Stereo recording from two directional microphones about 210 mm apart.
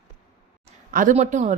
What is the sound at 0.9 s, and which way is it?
Speech, 40° right (ahead or behind).